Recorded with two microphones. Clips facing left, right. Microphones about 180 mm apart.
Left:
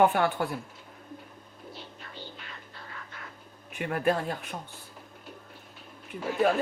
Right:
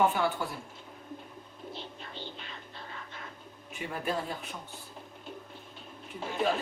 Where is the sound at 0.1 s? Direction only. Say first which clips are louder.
Left 3 dB; 60° left (ahead or behind).